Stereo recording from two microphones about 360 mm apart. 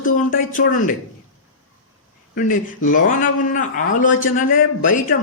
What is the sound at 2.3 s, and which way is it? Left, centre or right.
A man's voice, left.